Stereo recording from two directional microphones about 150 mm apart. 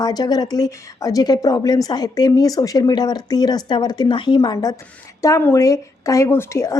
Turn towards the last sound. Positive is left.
turn(degrees=20)  # may be behind; listen again after turning